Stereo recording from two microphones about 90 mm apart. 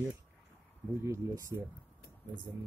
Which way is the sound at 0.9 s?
30° right (ahead or behind).